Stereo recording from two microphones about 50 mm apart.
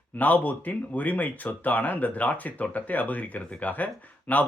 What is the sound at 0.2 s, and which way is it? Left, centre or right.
Speech, left.